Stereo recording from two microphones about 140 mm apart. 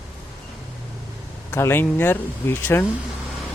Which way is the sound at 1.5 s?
15° left (ahead or behind).